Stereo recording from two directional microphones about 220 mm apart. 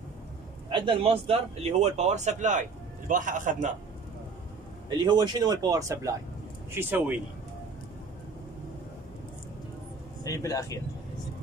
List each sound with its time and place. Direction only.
0.7 s a man's voice: 20° right (ahead or behind)
4.8 s speech: 20° right (ahead or behind)
10.2 s speech: 15° left (ahead or behind)